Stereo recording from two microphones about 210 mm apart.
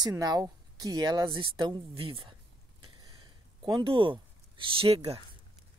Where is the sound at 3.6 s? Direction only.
20° right (ahead or behind).